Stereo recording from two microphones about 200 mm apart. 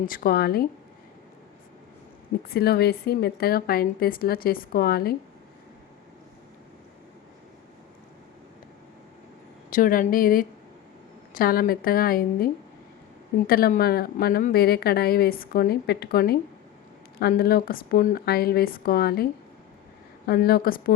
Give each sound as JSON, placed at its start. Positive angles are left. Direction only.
{"t": 0.0, "sound": "a woman's voice", "side_deg": 45}
{"t": 2.5, "sound": "a woman's voice", "side_deg": 50}
{"t": 9.6, "sound": "a woman's voice", "side_deg": 45}
{"t": 13.5, "sound": "a woman's voice", "side_deg": 45}